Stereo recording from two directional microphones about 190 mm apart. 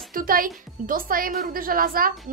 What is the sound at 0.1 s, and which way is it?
A woman's voice, 45° right (ahead or behind).